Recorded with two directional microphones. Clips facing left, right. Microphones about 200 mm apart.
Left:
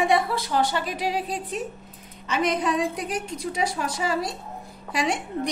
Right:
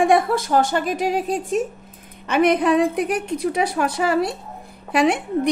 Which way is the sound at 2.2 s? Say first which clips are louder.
Right 7 dB; 60° right (ahead or behind).